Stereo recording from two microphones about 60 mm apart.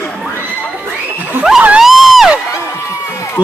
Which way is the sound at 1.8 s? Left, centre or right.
Centre.